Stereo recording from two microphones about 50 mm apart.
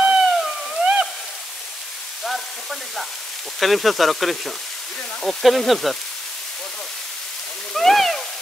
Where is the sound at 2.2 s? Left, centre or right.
Centre.